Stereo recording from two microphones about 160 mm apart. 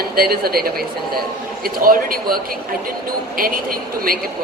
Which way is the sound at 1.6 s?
65° right (ahead or behind).